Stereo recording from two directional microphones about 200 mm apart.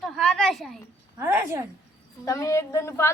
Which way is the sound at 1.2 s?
10° right (ahead or behind).